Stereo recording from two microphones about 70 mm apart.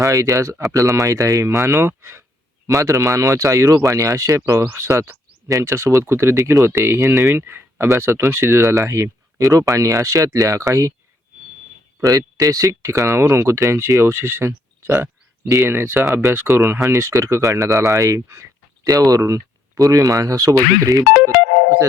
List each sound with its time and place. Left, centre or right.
0.0 s speech: right
2.6 s speech: right
7.3 s speech: right
12.0 s speech: right